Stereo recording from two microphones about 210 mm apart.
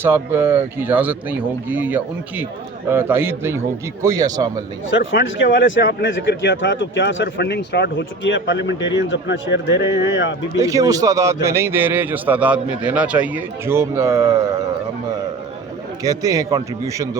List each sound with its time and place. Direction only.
0.0 s a man's voice: 10° right (ahead or behind)
4.9 s speech: 60° left (ahead or behind)
9.7 s a man's voice: 15° right (ahead or behind)
16.0 s a man's voice: 15° right (ahead or behind)